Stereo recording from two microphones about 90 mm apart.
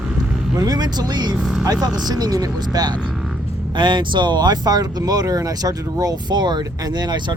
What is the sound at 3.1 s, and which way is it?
Vehicle, centre (ahead or behind).